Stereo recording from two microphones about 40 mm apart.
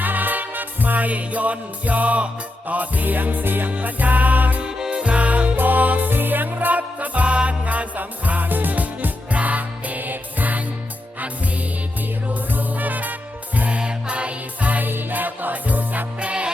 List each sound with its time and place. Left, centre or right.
0.0 s music: right
3.8 s music: right
4.6 s music: right
5.5 s music: right
12.3 s music: right
13.7 s music: right
14.8 s music: right
16.2 s music: right